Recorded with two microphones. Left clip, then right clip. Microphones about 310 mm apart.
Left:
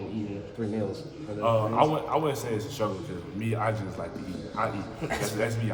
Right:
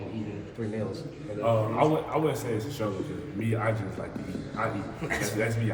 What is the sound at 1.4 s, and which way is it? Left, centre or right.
A man's voice, centre.